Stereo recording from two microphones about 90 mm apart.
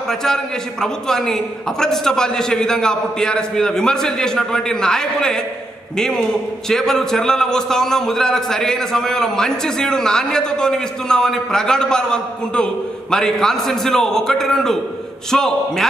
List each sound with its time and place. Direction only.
0.1 s a man's voice: 5° left (ahead or behind)